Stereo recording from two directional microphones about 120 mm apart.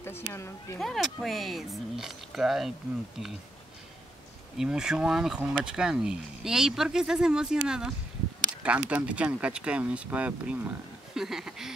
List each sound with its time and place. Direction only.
0.3 s speech: 20° left (ahead or behind)
0.7 s speech: centre (ahead or behind)
4.6 s speech: 5° right (ahead or behind)